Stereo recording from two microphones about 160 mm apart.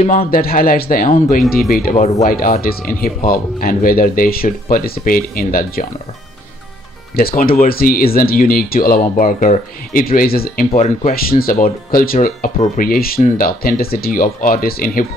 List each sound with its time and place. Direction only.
0.3 s speech: 65° left (ahead or behind)
7.2 s speech: 65° left (ahead or behind)
10.0 s speech: 70° left (ahead or behind)
10.7 s speech: 40° left (ahead or behind)
11.1 s speech: 65° left (ahead or behind)